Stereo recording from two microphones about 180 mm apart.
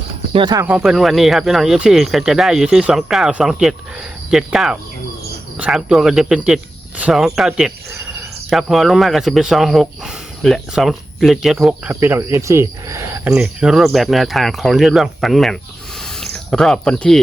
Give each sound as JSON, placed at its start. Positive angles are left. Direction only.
{"t": 0.3, "sound": "speech", "side_deg": -25}
{"t": 0.6, "sound": "speech", "side_deg": -5}
{"t": 11.9, "sound": "speech", "side_deg": -15}
{"t": 13.3, "sound": "speech", "side_deg": -5}
{"t": 16.0, "sound": "a sound", "side_deg": 5}